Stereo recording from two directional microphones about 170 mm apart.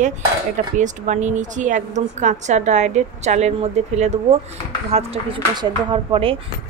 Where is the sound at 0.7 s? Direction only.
45° right (ahead or behind).